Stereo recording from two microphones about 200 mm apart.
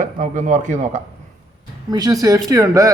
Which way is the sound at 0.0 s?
40° right (ahead or behind).